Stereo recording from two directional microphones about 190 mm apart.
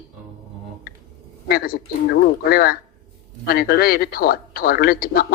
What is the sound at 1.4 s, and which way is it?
Speech, 50° left (ahead or behind).